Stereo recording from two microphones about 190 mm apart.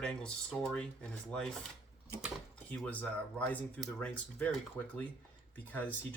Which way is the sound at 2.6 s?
5° left (ahead or behind).